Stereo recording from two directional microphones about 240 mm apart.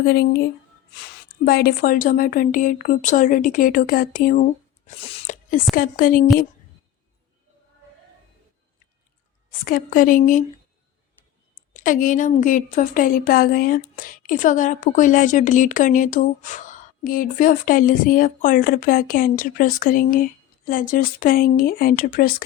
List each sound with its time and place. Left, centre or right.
0.0 s speech: left
1.5 s speech: left
4.9 s a sound: left
5.7 s speech: left
9.5 s speech: left
11.7 s speech: left